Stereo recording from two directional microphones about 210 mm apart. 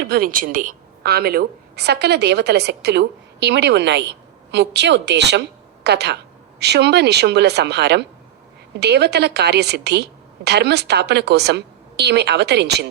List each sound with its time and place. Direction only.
0.1 s a woman's voice: 45° right (ahead or behind)